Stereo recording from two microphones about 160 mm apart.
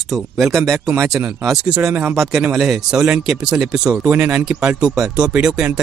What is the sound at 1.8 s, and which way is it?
Speech, 15° right (ahead or behind).